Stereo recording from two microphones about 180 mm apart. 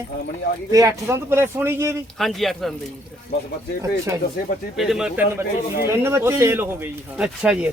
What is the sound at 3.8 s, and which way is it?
Speech, 15° right (ahead or behind).